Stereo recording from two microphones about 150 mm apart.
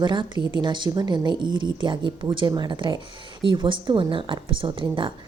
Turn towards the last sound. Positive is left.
turn(degrees=-35)  # may be behind; listen again after turning